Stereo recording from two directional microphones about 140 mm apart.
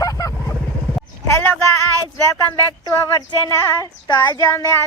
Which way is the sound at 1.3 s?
15° left (ahead or behind).